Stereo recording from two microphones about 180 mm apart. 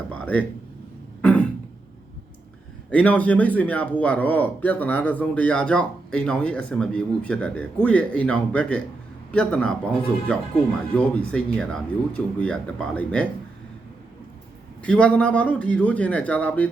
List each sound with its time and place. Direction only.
0.1 s a sound: 10° left (ahead or behind)
1.2 s throat clearing: 5° left (ahead or behind)
2.9 s a man's voice: 5° left (ahead or behind)
10.9 s speech: 5° left (ahead or behind)
14.8 s a man's voice: 5° left (ahead or behind)